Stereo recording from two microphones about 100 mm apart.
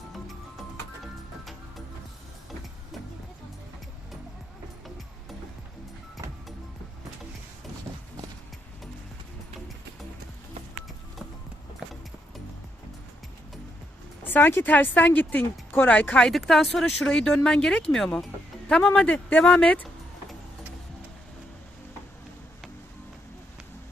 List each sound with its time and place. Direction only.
0.1 s music: centre (ahead or behind)
14.3 s speech: 20° left (ahead or behind)
16.3 s speech: centre (ahead or behind)
18.9 s speech: 15° left (ahead or behind)